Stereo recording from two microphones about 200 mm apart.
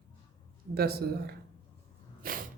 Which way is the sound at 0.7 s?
50° right (ahead or behind).